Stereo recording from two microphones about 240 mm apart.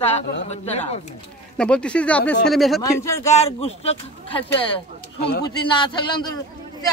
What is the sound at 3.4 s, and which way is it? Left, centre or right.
Speech, left.